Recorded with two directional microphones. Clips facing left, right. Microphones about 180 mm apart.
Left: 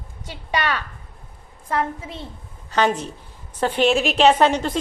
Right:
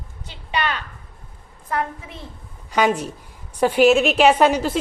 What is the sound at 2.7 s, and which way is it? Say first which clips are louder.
A woman's voice: right 1 dB; 10° right (ahead or behind).